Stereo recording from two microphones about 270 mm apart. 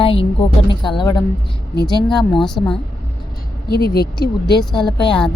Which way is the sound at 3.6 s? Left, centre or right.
Left.